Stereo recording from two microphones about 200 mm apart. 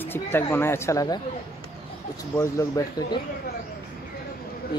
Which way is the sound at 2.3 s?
15° left (ahead or behind).